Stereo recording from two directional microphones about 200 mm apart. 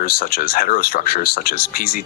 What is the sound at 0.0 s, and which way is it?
Speech, 50° left (ahead or behind).